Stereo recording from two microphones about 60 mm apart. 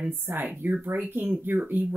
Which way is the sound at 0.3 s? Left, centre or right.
Right.